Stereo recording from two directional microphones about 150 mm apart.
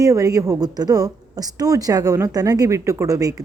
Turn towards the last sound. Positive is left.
turn(degrees=-25)  # may be behind; listen again after turning